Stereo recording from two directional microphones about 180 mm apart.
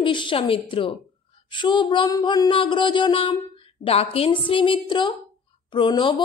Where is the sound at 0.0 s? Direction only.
25° left (ahead or behind).